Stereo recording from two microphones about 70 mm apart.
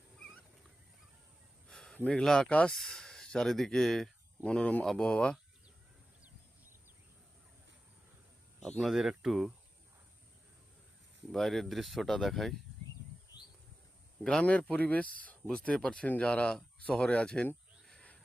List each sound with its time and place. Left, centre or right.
1.6 s a sound: centre
2.0 s speech: centre
4.4 s speech: centre
8.8 s speech: centre
11.3 s speech: centre
13.3 s bird: left
14.3 s speech: centre